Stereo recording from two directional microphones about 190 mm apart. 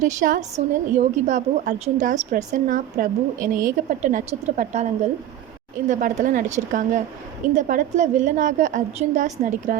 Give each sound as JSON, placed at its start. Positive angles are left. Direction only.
{"t": 0.0, "sound": "a woman's voice", "side_deg": -40}
{"t": 5.9, "sound": "a woman's voice", "side_deg": -45}